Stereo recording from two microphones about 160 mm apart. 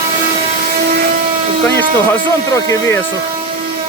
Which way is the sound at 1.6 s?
15° left (ahead or behind).